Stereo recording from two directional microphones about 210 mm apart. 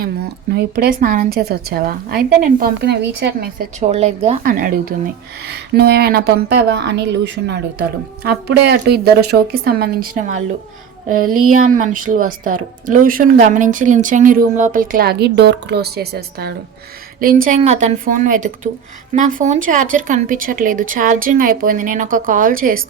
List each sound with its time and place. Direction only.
0.5 s a woman's voice: 50° right (ahead or behind)
3.8 s a woman's voice: 30° right (ahead or behind)
4.4 s a woman's voice: 40° right (ahead or behind)
11.1 s a sound: 90° right
11.5 s a woman's voice: 40° right (ahead or behind)
17.6 s a woman's voice: 30° right (ahead or behind)